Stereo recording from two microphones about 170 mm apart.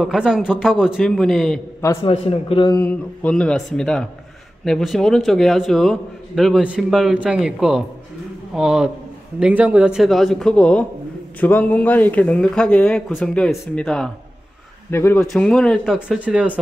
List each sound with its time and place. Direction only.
0.0 s a man's voice: 5° right (ahead or behind)
2.0 s a man's voice: 35° left (ahead or behind)
2.8 s a man's voice: 10° left (ahead or behind)
14.9 s speech: 15° left (ahead or behind)
15.1 s a man's voice: centre (ahead or behind)